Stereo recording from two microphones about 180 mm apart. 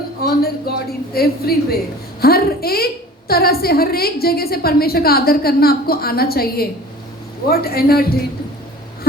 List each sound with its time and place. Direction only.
0.2 s music: 55° left (ahead or behind)
1.1 s a woman's voice: 55° left (ahead or behind)